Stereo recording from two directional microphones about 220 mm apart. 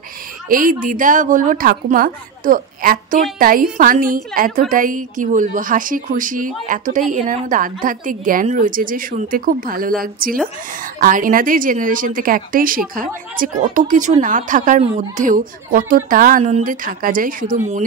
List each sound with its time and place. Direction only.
0.5 s speech: 40° right (ahead or behind)